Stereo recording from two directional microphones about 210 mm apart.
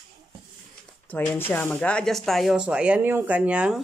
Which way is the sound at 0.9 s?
10° left (ahead or behind).